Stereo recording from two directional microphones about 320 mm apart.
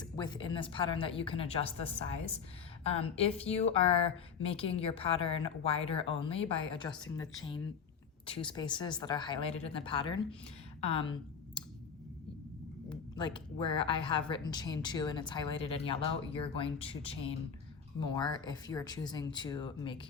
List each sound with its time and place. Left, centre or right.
0.0 s speech: centre
10.8 s a sound: centre
12.9 s a woman's voice: centre